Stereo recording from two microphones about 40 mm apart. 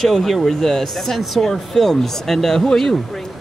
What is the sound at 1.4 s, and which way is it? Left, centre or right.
Speech, centre.